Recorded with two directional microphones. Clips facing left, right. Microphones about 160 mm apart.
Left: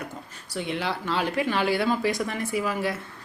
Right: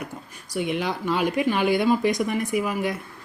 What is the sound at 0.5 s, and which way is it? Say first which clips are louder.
Speech: right 3 dB; 15° right (ahead or behind).